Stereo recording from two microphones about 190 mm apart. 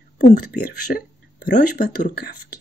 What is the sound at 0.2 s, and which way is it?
Speech, 45° left (ahead or behind).